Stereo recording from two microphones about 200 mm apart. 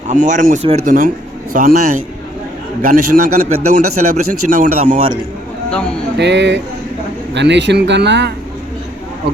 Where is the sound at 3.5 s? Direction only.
90° right.